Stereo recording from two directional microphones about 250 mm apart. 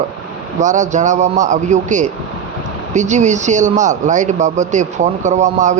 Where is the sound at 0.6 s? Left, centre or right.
Right.